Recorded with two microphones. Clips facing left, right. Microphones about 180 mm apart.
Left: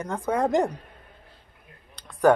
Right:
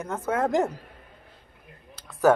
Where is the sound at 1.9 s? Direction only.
5° right (ahead or behind).